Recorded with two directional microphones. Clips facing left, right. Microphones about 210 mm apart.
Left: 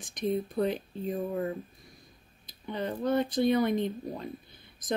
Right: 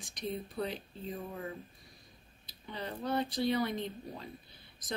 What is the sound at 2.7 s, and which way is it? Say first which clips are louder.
A woman's voice: left 7 dB; 50° left (ahead or behind).